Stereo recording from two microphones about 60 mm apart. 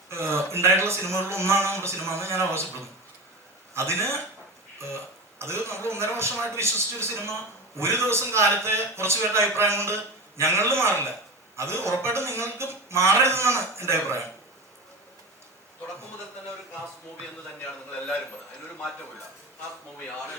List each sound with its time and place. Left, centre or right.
0.1 s a man's voice: right
3.8 s a man's voice: right